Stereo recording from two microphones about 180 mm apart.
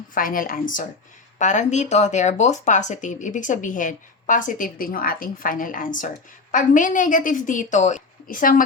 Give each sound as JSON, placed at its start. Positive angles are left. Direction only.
{"t": 0.1, "sound": "speech", "side_deg": 50}